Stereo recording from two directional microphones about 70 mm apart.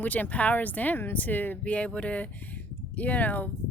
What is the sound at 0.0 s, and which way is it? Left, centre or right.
A woman's voice, left.